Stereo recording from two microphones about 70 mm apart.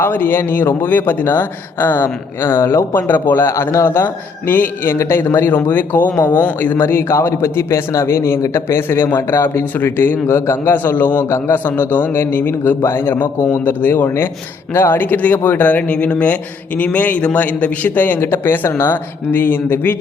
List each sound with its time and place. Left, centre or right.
0.0 s a man's voice: left